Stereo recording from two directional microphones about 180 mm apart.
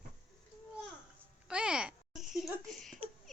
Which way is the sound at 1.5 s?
5° right (ahead or behind).